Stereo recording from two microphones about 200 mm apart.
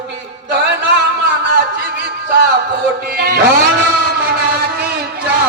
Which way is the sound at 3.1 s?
50° right (ahead or behind).